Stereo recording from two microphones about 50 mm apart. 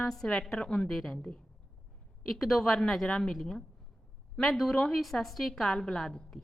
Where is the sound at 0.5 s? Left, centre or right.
Centre.